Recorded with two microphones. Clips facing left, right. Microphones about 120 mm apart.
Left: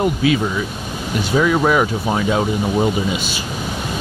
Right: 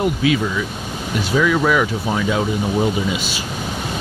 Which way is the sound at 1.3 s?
35° left (ahead or behind).